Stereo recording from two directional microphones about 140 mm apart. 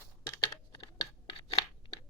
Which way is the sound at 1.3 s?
40° left (ahead or behind).